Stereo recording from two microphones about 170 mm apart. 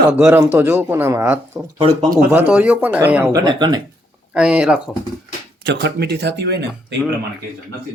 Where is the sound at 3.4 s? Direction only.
25° right (ahead or behind).